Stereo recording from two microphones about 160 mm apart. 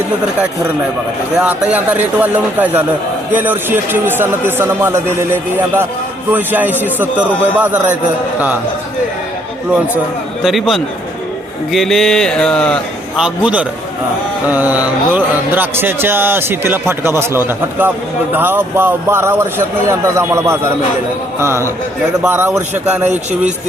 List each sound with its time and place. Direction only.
1.4 s a man's voice: 10° right (ahead or behind)
10.4 s a sound: centre (ahead or behind)
13.1 s a man's voice: 5° right (ahead or behind)